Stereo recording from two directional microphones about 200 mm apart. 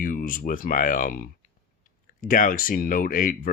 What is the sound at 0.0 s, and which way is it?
Speech, 45° left (ahead or behind).